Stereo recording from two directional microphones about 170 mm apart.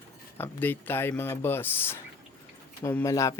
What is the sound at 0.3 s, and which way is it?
Speech, 10° left (ahead or behind).